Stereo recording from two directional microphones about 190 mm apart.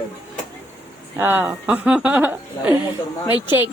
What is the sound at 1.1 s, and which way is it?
A woman's voice, 10° right (ahead or behind).